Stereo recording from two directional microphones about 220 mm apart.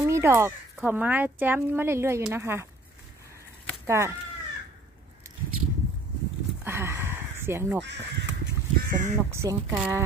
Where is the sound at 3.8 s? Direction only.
15° right (ahead or behind).